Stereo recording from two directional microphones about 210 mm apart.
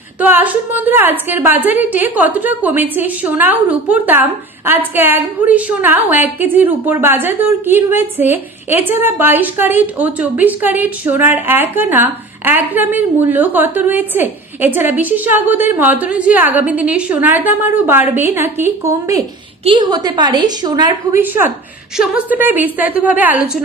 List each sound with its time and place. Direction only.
0.2 s a woman's voice: 10° right (ahead or behind)